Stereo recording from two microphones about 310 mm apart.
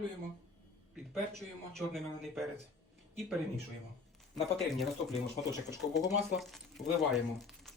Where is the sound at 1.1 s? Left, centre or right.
Centre.